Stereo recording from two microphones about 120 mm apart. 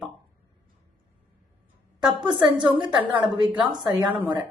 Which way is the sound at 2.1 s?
40° right (ahead or behind).